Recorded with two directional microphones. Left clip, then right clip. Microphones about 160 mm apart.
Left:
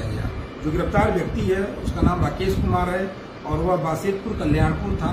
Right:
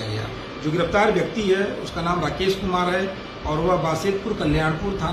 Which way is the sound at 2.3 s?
15° left (ahead or behind).